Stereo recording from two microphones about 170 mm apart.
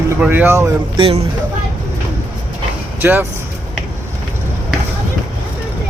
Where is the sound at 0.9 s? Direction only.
30° right (ahead or behind).